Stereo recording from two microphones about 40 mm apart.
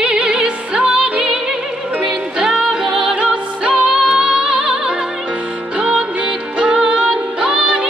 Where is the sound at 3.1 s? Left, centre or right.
Right.